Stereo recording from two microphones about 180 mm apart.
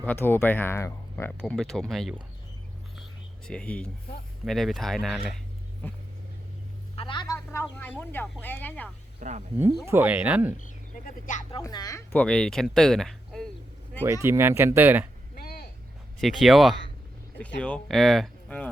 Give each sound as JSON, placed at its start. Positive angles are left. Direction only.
{"t": 0.0, "sound": "speech", "side_deg": 10}
{"t": 3.4, "sound": "speech", "side_deg": 5}
{"t": 6.9, "sound": "speech", "side_deg": 30}
{"t": 7.3, "sound": "speech", "side_deg": 15}
{"t": 9.2, "sound": "speech", "side_deg": -45}
{"t": 9.8, "sound": "speech", "side_deg": -10}
{"t": 10.6, "sound": "speech", "side_deg": 50}
{"t": 11.6, "sound": "speech", "side_deg": 20}
{"t": 12.1, "sound": "speech", "side_deg": 5}
{"t": 14.0, "sound": "speech", "side_deg": -15}
{"t": 15.4, "sound": "vehicle", "side_deg": 60}
{"t": 16.2, "sound": "speech", "side_deg": 0}